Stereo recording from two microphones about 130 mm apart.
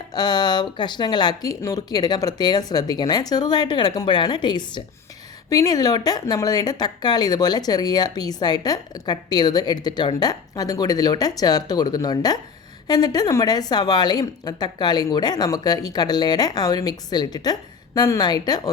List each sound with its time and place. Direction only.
0.1 s speech: 30° left (ahead or behind)